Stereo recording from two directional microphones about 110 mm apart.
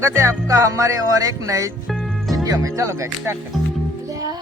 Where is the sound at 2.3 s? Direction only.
30° right (ahead or behind).